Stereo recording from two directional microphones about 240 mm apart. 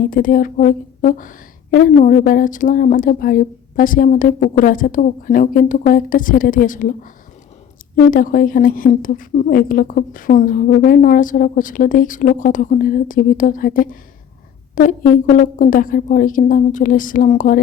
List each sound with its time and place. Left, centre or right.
0.1 s a woman's voice: left